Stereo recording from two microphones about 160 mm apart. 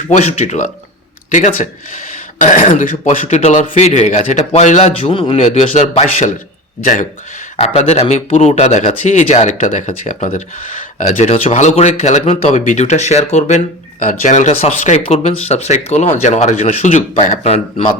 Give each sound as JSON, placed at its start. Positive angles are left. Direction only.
{"t": 0.1, "sound": "speech", "side_deg": 45}
{"t": 7.5, "sound": "speech", "side_deg": 40}